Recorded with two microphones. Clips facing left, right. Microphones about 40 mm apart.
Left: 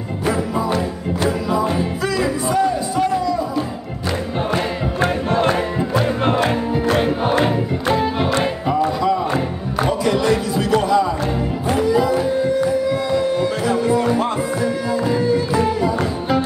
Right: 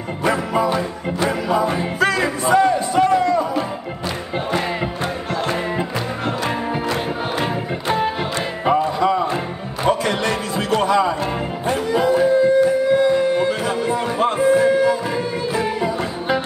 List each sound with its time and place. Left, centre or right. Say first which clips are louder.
0.2 s music: right 2 dB; right
5.3 s music: left 4 dB; left
8.6 s music: right 3 dB; right
11.6 s a sound: left 1 dB; right